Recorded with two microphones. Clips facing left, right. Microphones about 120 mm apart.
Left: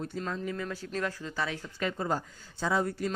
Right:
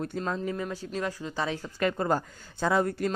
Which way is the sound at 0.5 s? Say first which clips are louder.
Right 2 dB; 20° right (ahead or behind).